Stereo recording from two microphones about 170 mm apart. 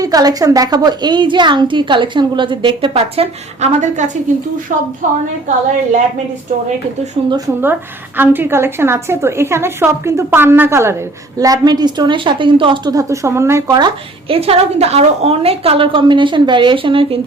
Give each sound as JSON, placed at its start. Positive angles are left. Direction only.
{"t": 0.0, "sound": "a woman's voice", "side_deg": -20}
{"t": 7.6, "sound": "a woman's voice", "side_deg": -10}